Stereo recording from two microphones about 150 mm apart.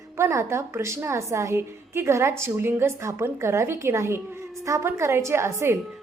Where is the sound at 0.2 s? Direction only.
20° right (ahead or behind).